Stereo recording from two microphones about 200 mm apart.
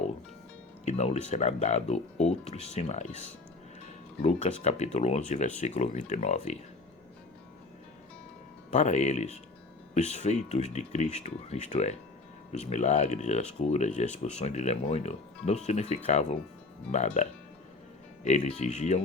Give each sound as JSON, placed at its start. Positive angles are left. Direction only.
{"t": 0.9, "sound": "speech", "side_deg": 30}
{"t": 8.7, "sound": "speech", "side_deg": 35}